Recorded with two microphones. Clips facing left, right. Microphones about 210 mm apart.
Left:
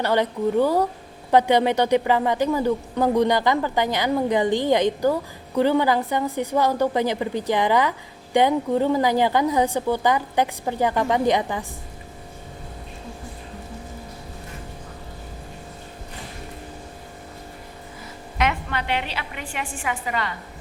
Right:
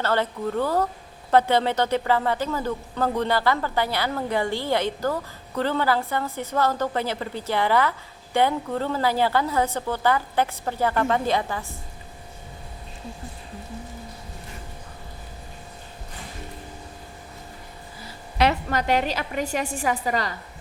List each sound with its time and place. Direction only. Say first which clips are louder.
0.0 s speech: left 3 dB; 15° left (ahead or behind)
18.3 s a woman's voice: right 3 dB; 40° right (ahead or behind)